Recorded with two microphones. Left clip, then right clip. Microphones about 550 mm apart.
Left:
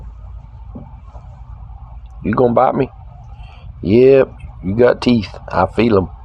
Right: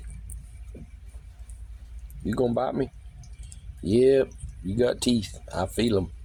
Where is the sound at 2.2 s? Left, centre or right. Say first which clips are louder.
Left 13 dB; right.